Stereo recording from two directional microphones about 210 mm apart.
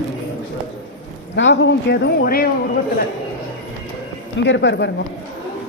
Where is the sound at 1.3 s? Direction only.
60° left (ahead or behind).